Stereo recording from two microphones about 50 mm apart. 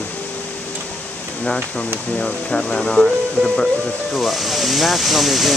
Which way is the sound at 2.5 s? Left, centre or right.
Centre.